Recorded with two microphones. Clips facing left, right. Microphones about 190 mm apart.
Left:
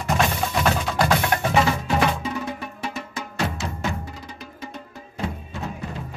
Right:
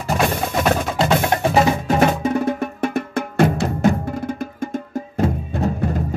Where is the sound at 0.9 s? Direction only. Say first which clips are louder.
Right 3 dB; 25° right (ahead or behind).